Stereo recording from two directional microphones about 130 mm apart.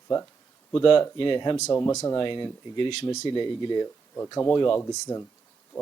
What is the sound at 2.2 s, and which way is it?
Speech, 40° left (ahead or behind).